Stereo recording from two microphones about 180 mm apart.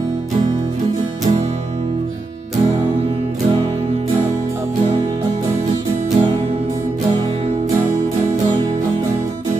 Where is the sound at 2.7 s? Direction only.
15° right (ahead or behind).